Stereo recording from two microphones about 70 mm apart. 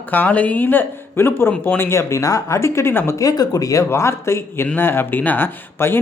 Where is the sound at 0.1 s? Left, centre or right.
Left.